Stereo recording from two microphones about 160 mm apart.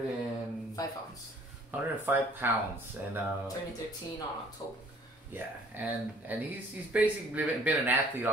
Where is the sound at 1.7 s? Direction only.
10° right (ahead or behind).